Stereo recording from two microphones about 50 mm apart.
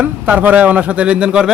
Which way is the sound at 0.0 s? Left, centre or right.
Right.